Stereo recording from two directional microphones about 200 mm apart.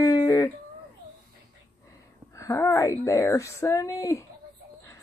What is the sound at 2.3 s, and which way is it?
Speech, 15° left (ahead or behind).